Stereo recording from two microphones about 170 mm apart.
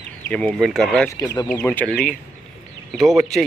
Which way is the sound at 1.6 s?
5° left (ahead or behind).